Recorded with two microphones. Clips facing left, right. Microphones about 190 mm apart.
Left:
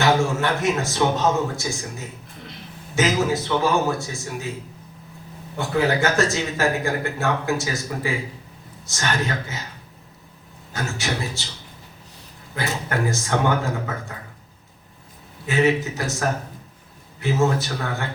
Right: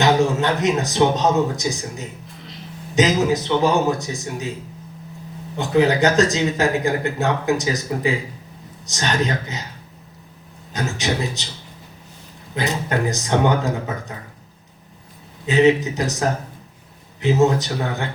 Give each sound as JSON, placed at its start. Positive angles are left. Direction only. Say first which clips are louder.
{"t": 0.0, "sound": "a man's voice", "louder": "right 3 dB", "side_deg": -20}
{"t": 5.5, "sound": "speech", "louder": "right 4 dB", "side_deg": -20}
{"t": 10.7, "sound": "speech", "louder": "right 4 dB", "side_deg": -20}
{"t": 12.5, "sound": "speech", "louder": "right 3 dB", "side_deg": -20}
{"t": 15.4, "sound": "speech", "louder": "right 5 dB", "side_deg": -20}